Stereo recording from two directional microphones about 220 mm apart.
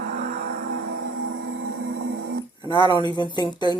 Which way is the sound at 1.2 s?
55° right (ahead or behind).